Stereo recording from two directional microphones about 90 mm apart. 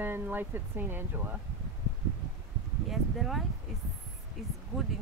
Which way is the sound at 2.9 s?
Centre (ahead or behind).